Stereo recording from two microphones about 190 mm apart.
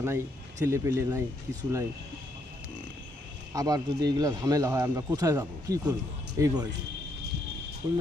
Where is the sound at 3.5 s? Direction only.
20° right (ahead or behind).